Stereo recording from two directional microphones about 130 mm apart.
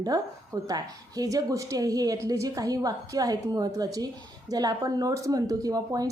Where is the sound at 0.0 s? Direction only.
25° right (ahead or behind).